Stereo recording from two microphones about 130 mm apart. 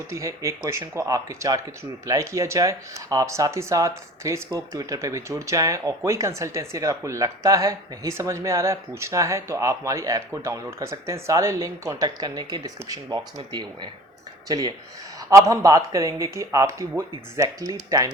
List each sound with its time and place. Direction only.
0.1 s speech: 25° right (ahead or behind)